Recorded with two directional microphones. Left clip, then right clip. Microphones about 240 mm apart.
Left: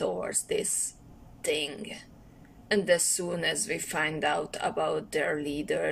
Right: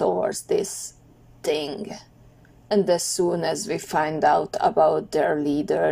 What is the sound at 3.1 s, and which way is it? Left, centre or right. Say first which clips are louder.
A woman's voice: right 7 dB; centre.